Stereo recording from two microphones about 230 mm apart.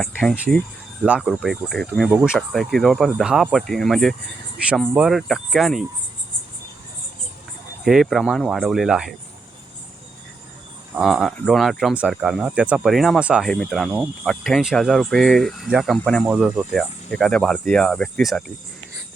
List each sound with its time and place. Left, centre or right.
0.0 s speech: centre
7.9 s speech: centre
10.9 s speech: centre